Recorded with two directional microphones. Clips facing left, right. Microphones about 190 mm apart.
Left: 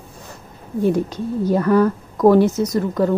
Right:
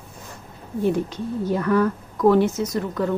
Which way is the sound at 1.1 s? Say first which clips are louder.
Left 5 dB; 40° left (ahead or behind).